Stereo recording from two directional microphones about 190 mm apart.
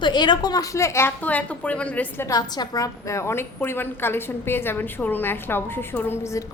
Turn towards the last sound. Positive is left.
turn(degrees=15)  # may be behind; listen again after turning